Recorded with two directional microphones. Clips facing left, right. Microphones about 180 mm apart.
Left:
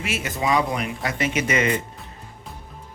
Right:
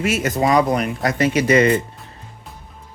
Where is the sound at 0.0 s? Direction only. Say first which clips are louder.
Right 7 dB; 45° right (ahead or behind).